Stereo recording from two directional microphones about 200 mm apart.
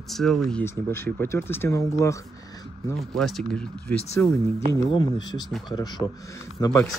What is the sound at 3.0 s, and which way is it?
Speech, centre (ahead or behind).